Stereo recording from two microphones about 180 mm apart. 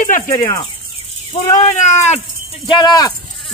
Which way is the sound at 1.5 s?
40° left (ahead or behind).